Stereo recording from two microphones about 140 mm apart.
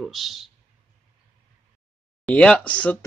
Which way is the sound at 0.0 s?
Centre (ahead or behind).